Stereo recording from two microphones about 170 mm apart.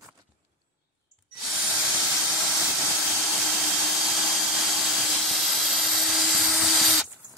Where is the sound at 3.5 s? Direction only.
Centre (ahead or behind).